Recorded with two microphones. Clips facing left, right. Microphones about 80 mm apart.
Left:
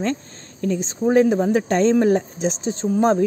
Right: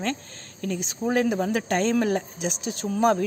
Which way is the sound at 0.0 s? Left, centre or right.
Left.